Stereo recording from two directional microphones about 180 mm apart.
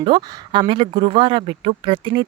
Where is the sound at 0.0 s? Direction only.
25° right (ahead or behind).